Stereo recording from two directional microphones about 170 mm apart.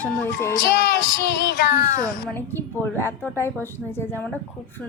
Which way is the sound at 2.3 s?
10° left (ahead or behind).